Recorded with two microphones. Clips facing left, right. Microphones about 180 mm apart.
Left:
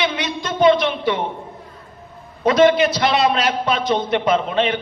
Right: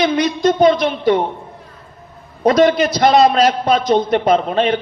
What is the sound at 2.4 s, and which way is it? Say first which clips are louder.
A man's voice: right 1 dB; 40° right (ahead or behind).